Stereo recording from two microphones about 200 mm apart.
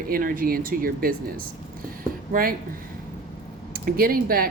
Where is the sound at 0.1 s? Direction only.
45° right (ahead or behind).